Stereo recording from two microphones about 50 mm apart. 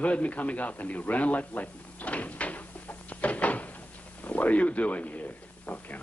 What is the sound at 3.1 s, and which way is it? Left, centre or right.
Cupboard open or close, left.